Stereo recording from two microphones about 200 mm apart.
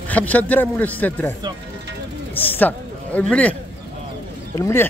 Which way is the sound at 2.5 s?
10° left (ahead or behind).